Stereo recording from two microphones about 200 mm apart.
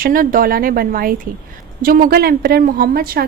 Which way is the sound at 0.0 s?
45° right (ahead or behind).